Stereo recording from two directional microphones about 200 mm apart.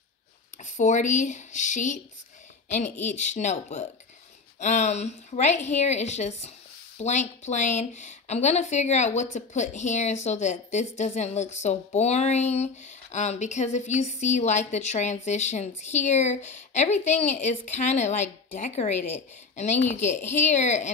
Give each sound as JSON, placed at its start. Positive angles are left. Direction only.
{"t": 0.7, "sound": "speech", "side_deg": 40}
{"t": 3.2, "sound": "speech", "side_deg": 35}
{"t": 18.9, "sound": "a woman's voice", "side_deg": 10}
{"t": 19.5, "sound": "a woman's voice", "side_deg": 35}